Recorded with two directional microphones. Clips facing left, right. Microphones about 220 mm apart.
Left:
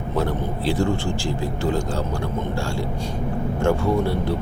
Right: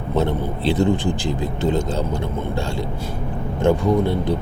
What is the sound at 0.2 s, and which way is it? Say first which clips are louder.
Speech: right 3 dB; 25° right (ahead or behind).